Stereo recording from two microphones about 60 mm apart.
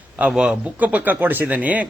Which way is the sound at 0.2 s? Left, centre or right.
Centre.